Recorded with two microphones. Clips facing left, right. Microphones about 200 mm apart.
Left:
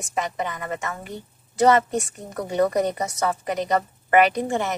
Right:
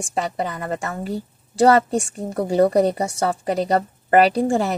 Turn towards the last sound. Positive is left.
turn(degrees=-35)  # may be behind; listen again after turning